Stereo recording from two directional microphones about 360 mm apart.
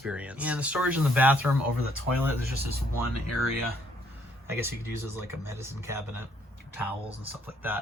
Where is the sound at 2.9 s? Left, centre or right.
Left.